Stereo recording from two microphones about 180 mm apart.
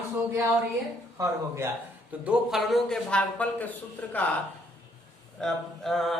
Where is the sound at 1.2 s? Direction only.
15° right (ahead or behind).